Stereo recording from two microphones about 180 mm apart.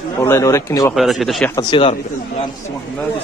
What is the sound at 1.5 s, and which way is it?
Speech, 30° left (ahead or behind).